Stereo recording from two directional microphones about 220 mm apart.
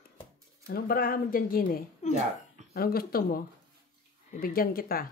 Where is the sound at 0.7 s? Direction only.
45° left (ahead or behind).